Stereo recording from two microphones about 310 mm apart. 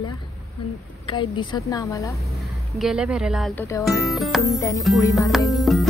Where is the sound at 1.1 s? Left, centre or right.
Centre.